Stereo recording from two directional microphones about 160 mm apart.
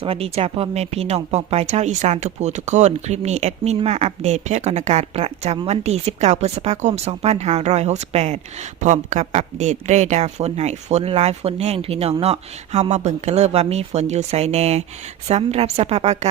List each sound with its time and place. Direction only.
0.0 s a woman's voice: 35° right (ahead or behind)